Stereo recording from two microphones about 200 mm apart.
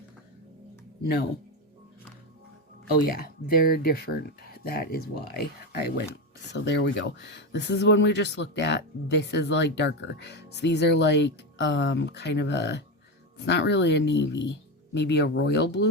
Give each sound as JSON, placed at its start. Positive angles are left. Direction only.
{"t": 1.0, "sound": "speech", "side_deg": 50}
{"t": 2.9, "sound": "speech", "side_deg": 50}
{"t": 6.5, "sound": "speech", "side_deg": 60}